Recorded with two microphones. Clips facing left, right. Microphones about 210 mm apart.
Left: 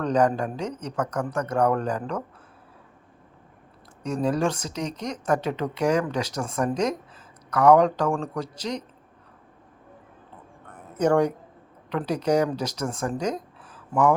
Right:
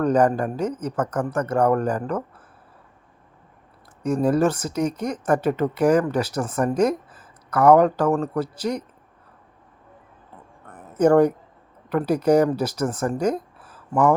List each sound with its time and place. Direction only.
0.0 s speech: 5° right (ahead or behind)
4.0 s speech: 10° right (ahead or behind)
10.9 s speech: 5° right (ahead or behind)